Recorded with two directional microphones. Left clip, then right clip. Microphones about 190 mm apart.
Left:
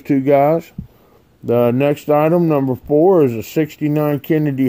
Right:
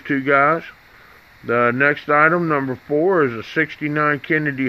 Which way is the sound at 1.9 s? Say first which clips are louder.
Left 1 dB; 25° left (ahead or behind).